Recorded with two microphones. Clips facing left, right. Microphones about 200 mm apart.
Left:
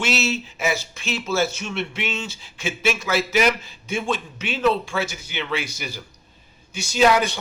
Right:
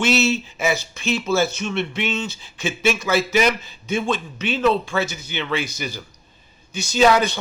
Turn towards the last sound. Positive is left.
turn(degrees=10)  # may be behind; listen again after turning